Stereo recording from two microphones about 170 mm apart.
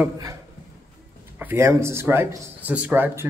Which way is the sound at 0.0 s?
20° right (ahead or behind).